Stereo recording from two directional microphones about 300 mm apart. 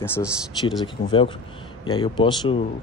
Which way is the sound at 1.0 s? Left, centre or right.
Centre.